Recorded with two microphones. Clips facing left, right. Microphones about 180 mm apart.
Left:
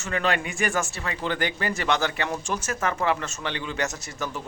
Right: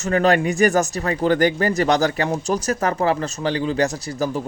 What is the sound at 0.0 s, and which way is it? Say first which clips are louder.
Speech: right 9 dB; 40° right (ahead or behind).